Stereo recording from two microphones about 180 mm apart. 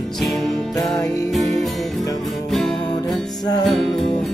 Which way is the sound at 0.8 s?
Centre (ahead or behind).